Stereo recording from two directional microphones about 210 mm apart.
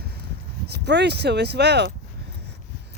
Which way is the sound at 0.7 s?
55° right (ahead or behind).